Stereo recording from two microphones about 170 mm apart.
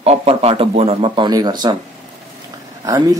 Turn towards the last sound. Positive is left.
turn(degrees=-20)  # may be behind; listen again after turning